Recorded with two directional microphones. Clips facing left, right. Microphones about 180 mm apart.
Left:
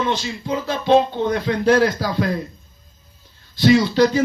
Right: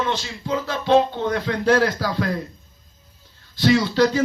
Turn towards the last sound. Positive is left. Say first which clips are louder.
# left 2 dB
turn(degrees=15)  # may be behind; listen again after turning